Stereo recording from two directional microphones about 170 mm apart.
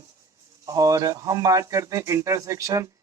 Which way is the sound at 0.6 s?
20° right (ahead or behind).